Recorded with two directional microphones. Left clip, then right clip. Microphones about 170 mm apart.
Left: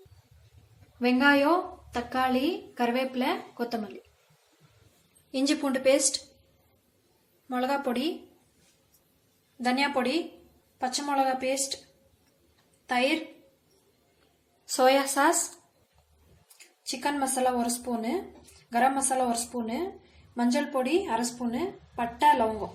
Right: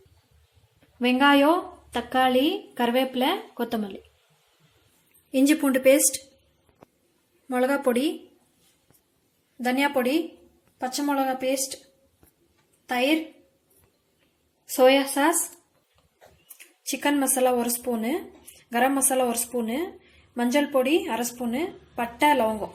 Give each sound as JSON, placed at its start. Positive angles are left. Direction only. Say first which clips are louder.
{"t": 0.9, "sound": "speech", "louder": "right 3 dB", "side_deg": -45}
{"t": 5.3, "sound": "a woman's voice", "louder": "right 6 dB", "side_deg": -35}
{"t": 7.4, "sound": "a woman's voice", "louder": "right 5 dB", "side_deg": -40}
{"t": 9.6, "sound": "a woman's voice", "louder": "right 3 dB", "side_deg": -35}
{"t": 12.9, "sound": "a woman's voice", "louder": "right 2 dB", "side_deg": -35}
{"t": 14.8, "sound": "a woman's voice", "louder": "right 3 dB", "side_deg": -35}
{"t": 16.9, "sound": "a woman's voice", "louder": "right 4 dB", "side_deg": -35}
{"t": 20.3, "sound": "a woman's voice", "louder": "right 5 dB", "side_deg": -35}